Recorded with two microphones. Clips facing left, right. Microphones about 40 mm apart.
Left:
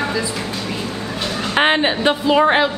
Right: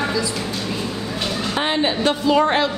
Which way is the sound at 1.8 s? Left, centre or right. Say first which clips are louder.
Left 2 dB; left.